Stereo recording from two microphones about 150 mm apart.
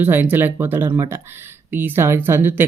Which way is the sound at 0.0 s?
15° right (ahead or behind).